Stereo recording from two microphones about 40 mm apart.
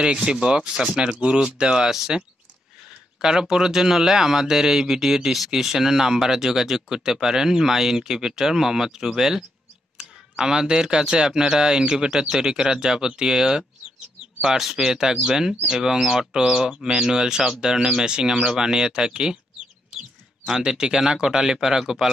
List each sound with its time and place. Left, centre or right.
0.0 s speech: right